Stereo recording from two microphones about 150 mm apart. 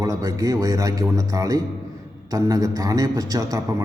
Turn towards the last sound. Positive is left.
turn(degrees=-25)  # may be behind; listen again after turning